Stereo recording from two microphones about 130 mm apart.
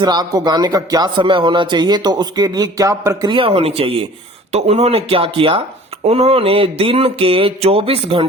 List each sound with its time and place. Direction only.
0.0 s speech: 30° right (ahead or behind)
3.3 s mantra: 45° right (ahead or behind)